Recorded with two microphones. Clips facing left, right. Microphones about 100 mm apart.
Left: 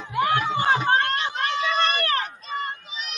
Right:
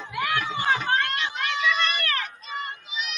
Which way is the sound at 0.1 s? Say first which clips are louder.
Left 5 dB; 35° left (ahead or behind).